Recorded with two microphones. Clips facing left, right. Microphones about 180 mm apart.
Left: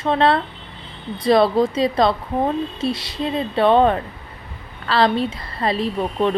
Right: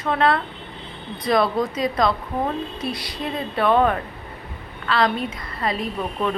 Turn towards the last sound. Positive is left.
turn(degrees=30)  # may be behind; listen again after turning